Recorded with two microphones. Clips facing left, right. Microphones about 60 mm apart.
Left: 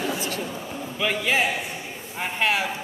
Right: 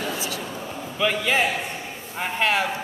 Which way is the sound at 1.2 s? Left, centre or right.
Centre.